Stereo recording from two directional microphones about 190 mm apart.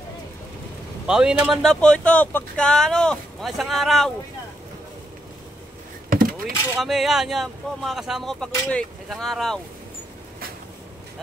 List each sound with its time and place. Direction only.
1.0 s speech: 5° right (ahead or behind)
6.0 s power windows: 50° right (ahead or behind)
6.8 s speech: centre (ahead or behind)